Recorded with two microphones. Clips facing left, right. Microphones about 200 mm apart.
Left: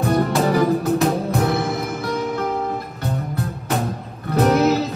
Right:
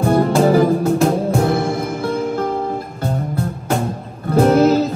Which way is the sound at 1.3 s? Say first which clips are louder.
Right 3 dB; 30° right (ahead or behind).